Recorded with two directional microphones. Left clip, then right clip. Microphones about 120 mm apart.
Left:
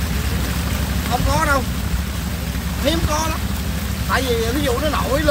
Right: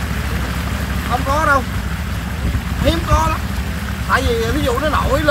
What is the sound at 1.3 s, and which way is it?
Speech, 15° left (ahead or behind).